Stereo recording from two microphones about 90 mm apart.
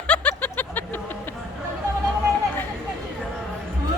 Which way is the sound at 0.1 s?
15° left (ahead or behind).